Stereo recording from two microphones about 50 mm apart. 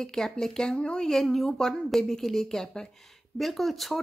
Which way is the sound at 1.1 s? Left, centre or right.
Centre.